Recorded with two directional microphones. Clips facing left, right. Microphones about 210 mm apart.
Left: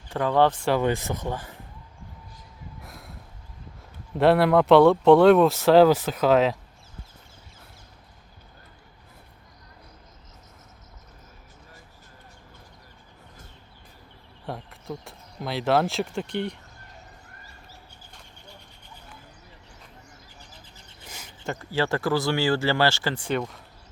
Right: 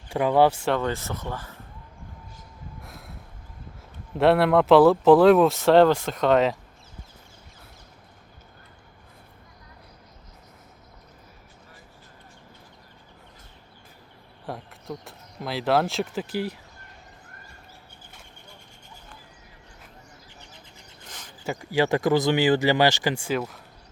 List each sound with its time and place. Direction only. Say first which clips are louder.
0.1 s speech: right 2 dB; 10° right (ahead or behind)
0.8 s speech: left 3 dB; 15° left (ahead or behind)
2.8 s a sound: even; centre (ahead or behind)
4.2 s speech: even; centre (ahead or behind)
14.4 s speech: even; centre (ahead or behind)
21.4 s speech: right 3 dB; 15° right (ahead or behind)